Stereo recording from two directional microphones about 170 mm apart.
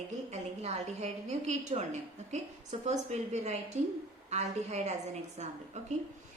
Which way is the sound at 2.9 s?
40° right (ahead or behind).